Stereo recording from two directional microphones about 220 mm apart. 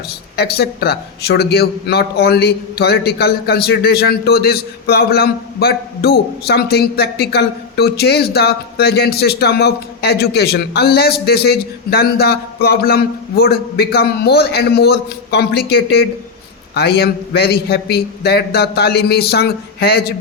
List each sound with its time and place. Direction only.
0.3 s a man's voice: 45° left (ahead or behind)